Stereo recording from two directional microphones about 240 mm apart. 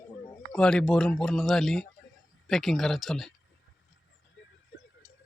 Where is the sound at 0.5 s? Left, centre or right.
Centre.